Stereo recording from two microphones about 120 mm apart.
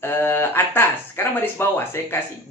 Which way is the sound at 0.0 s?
20° left (ahead or behind).